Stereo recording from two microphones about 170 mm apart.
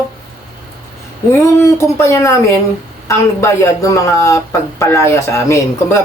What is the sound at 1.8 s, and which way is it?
Speech, 15° left (ahead or behind).